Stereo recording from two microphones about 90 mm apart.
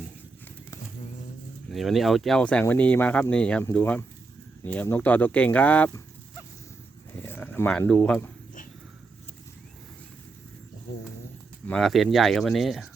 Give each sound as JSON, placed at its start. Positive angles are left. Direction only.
{"t": 1.7, "sound": "speech", "side_deg": 0}
{"t": 2.4, "sound": "speech", "side_deg": 15}
{"t": 7.2, "sound": "a sound", "side_deg": 25}
{"t": 7.7, "sound": "speech", "side_deg": 15}
{"t": 11.8, "sound": "speech", "side_deg": 0}